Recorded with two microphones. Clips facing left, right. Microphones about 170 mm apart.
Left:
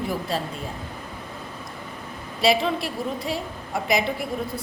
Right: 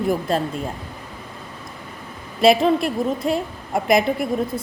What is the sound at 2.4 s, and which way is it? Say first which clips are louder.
A woman's voice: right 6 dB; 50° right (ahead or behind).